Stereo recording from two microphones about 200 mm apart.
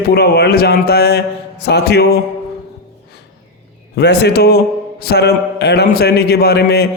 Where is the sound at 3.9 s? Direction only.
55° left (ahead or behind).